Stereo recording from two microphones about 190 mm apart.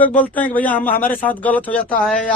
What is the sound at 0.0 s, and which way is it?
Speech, 10° left (ahead or behind).